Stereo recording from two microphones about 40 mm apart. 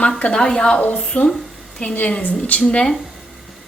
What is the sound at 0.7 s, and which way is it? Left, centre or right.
A woman's voice, left.